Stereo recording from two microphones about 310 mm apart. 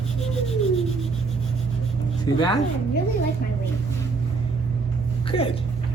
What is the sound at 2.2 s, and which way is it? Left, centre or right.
Speech, centre.